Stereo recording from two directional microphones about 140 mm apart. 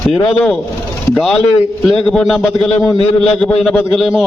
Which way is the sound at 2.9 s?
45° left (ahead or behind).